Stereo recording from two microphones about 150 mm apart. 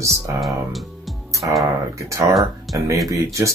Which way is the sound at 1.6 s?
20° right (ahead or behind).